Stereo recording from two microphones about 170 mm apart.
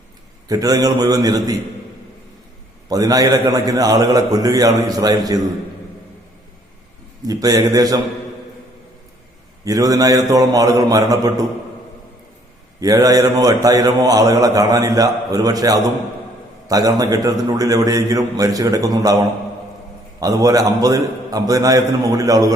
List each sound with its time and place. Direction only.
0.4 s a man's voice: 20° right (ahead or behind)
2.9 s a man's voice: 20° right (ahead or behind)
7.3 s a man's voice: 20° right (ahead or behind)
9.6 s a man's voice: 20° right (ahead or behind)
12.8 s a man's voice: 20° right (ahead or behind)
20.1 s a man's voice: 20° right (ahead or behind)